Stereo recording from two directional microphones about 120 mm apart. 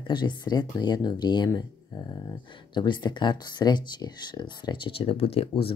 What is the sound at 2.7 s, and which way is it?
Speech, 40° left (ahead or behind).